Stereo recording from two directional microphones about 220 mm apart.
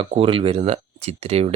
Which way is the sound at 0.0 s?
25° right (ahead or behind).